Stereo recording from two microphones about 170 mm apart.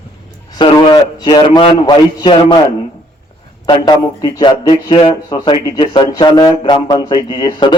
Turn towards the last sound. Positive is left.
turn(degrees=25)  # may be behind; listen again after turning